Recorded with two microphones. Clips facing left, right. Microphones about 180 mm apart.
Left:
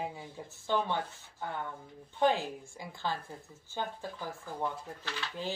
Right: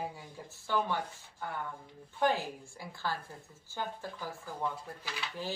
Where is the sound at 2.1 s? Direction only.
20° left (ahead or behind).